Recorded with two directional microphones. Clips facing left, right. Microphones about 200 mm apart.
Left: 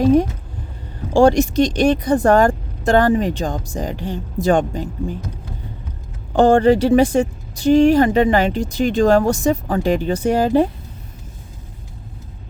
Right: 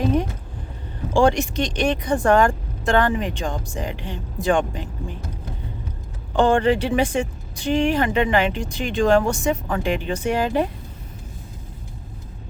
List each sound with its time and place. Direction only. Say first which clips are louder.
1.1 s speech: left 5 dB; 40° left (ahead or behind)
6.3 s speech: left 5 dB; 40° left (ahead or behind)